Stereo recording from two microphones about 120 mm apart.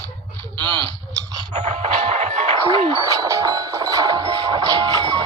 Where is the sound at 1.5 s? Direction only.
75° right (ahead or behind).